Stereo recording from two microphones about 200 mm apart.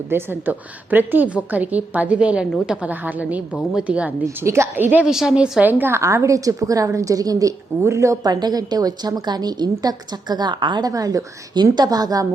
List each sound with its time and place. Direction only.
0.1 s a woman's voice: 10° right (ahead or behind)